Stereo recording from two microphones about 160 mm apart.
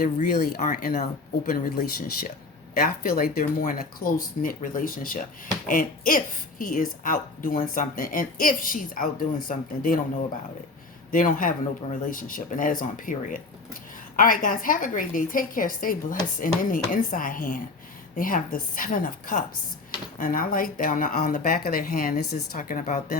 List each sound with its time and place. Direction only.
0.0 s speech: 65° left (ahead or behind)
0.6 s a woman's voice: 60° left (ahead or behind)
11.1 s a woman's voice: 60° left (ahead or behind); by 22.4 s 80° left
22.5 s speech: 50° left (ahead or behind)